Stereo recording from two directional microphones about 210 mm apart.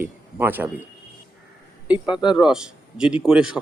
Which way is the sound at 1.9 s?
5° right (ahead or behind).